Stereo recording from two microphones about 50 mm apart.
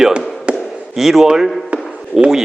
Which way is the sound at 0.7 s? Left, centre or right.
Centre.